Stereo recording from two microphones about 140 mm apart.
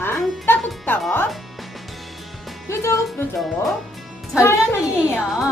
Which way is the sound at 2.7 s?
20° left (ahead or behind).